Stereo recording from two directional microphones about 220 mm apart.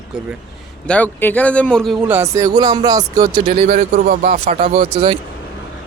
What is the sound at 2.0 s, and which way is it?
Speech, 10° right (ahead or behind).